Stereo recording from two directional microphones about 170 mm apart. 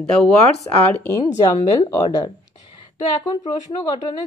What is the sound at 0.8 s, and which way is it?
A woman's voice, 10° left (ahead or behind).